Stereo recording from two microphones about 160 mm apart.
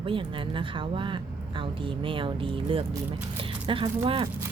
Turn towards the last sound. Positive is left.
turn(degrees=-30)  # may be behind; listen again after turning